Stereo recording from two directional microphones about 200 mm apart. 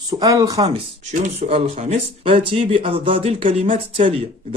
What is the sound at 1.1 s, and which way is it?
Speech, 35° right (ahead or behind).